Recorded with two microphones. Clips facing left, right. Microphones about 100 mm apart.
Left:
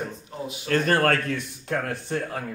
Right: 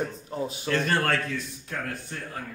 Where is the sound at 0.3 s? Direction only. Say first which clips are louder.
Right 5 dB; 35° right (ahead or behind).